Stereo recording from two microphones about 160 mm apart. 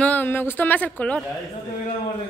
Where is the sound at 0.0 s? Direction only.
10° left (ahead or behind).